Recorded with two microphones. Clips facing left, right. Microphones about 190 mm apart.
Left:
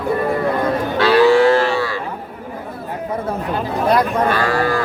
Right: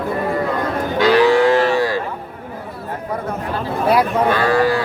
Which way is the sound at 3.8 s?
5° right (ahead or behind).